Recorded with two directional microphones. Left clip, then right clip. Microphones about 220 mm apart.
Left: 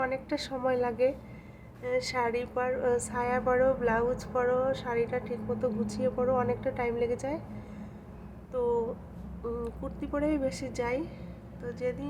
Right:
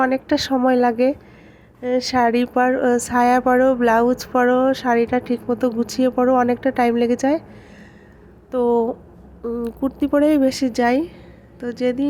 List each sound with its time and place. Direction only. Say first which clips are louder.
0.0 s speech: right 13 dB; 40° right (ahead or behind)
8.4 s speech: right 11 dB; 40° right (ahead or behind)